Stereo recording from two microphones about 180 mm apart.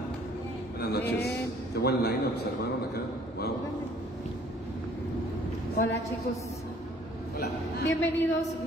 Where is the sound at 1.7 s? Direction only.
60° left (ahead or behind).